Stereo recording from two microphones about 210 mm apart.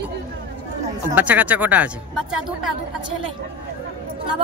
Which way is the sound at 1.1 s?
5° right (ahead or behind).